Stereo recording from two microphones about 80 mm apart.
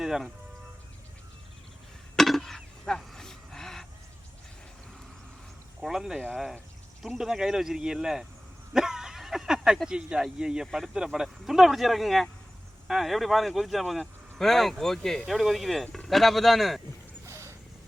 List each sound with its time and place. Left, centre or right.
0.0 s speech: centre
2.1 s a sound: centre
5.8 s speech: centre
8.7 s a sound: centre
9.7 s speech: centre
17.2 s dog: right